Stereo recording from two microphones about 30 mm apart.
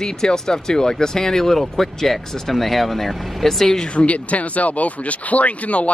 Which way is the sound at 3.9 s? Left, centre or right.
Left.